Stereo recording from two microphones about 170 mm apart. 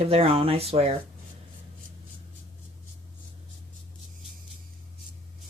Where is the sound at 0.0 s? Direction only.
35° right (ahead or behind).